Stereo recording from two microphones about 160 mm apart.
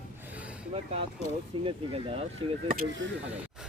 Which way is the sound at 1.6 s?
35° right (ahead or behind).